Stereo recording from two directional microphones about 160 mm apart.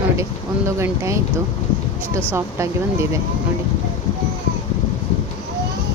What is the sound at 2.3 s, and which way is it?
Speech, 15° right (ahead or behind).